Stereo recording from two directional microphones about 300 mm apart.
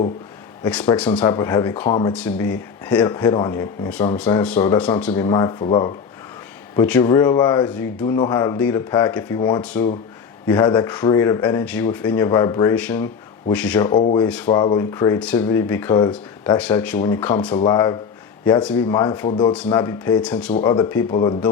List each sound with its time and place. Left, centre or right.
0.6 s speech: centre
13.9 s speech: centre
14.3 s speech: centre
19.5 s speech: centre
20.6 s speech: centre